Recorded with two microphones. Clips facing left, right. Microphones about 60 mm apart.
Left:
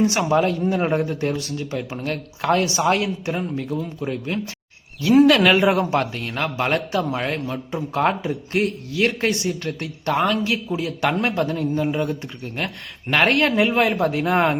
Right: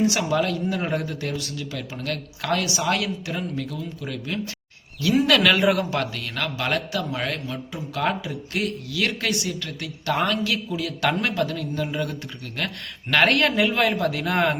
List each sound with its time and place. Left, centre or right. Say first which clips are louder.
0.0 s a man's voice: left 3 dB; left
10.2 s speech: left 3 dB; left